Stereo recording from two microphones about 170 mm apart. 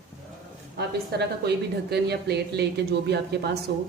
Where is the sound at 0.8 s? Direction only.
70° right (ahead or behind).